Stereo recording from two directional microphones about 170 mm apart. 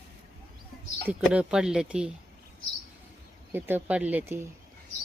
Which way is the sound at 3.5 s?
10° right (ahead or behind).